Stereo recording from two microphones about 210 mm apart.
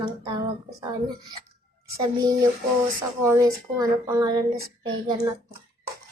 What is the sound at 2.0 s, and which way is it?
Speech, 15° right (ahead or behind).